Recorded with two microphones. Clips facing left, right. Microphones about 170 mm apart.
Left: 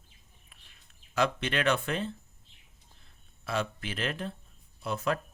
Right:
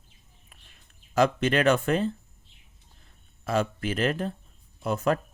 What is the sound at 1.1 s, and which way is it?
Speech, 45° right (ahead or behind).